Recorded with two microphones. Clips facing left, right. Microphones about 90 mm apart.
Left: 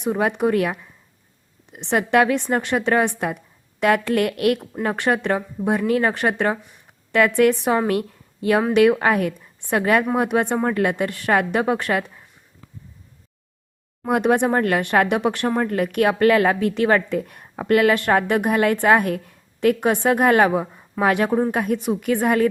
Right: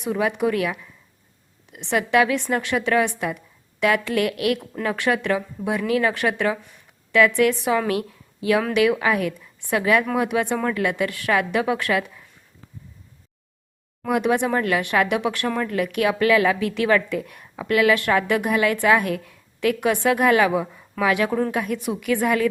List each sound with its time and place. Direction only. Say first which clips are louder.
0.2 s a woman's voice: left 2 dB; 40° left (ahead or behind)
14.1 s a woman's voice: left 2 dB; 45° left (ahead or behind)